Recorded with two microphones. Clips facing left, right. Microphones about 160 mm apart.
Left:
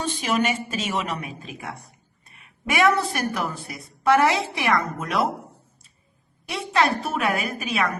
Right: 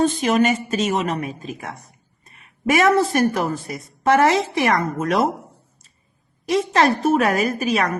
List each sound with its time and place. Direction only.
0.2 s a woman's voice: 40° right (ahead or behind)
6.4 s a woman's voice: 40° right (ahead or behind)